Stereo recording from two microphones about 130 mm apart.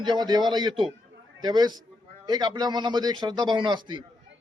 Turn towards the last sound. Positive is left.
turn(degrees=-35)  # may be behind; listen again after turning